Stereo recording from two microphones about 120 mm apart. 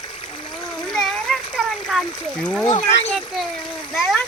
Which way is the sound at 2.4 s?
Centre (ahead or behind).